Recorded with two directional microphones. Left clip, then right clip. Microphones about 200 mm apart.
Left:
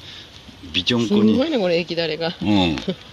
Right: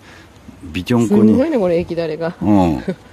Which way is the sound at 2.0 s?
35° right (ahead or behind).